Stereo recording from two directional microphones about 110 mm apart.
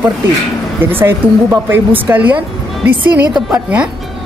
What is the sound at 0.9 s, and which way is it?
Speech, 20° right (ahead or behind).